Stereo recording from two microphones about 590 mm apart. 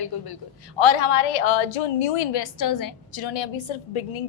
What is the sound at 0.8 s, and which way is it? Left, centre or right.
A woman's voice, left.